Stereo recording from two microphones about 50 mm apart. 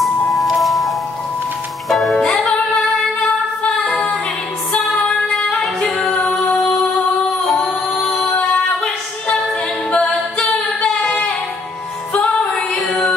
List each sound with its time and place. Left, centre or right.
0.0 s music: centre
4.7 s music: left; by 6.1 s centre
6.3 s music: left
7.6 s singing: centre
9.8 s a capella: left
10.8 s a sound: left